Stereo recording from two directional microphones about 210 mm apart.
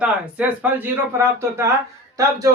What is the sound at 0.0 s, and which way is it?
Speech, 5° right (ahead or behind).